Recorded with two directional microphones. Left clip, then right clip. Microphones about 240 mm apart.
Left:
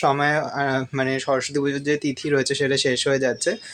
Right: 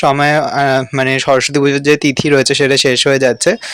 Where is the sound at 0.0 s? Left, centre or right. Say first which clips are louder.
Right 9 dB; right.